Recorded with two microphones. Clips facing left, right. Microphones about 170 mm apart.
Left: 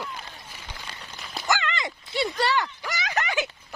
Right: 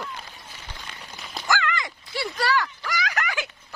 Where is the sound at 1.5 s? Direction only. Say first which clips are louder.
Right 1 dB; 25° left (ahead or behind).